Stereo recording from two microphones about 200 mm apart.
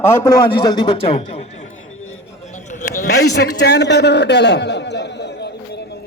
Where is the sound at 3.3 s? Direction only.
55° left (ahead or behind).